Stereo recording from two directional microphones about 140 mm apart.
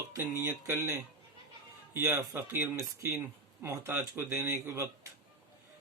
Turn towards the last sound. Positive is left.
turn(degrees=-20)  # may be behind; listen again after turning